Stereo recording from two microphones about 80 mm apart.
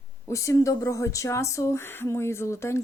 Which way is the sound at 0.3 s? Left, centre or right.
Left.